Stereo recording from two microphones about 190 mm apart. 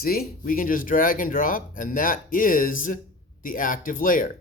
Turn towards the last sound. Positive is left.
turn(degrees=45)  # may be behind; listen again after turning